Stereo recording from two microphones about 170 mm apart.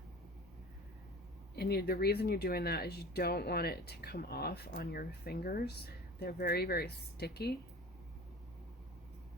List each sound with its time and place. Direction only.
1.5 s speech: 65° left (ahead or behind)